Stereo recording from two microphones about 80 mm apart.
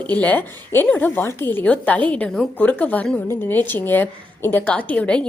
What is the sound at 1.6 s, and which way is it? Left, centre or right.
A woman's voice, centre.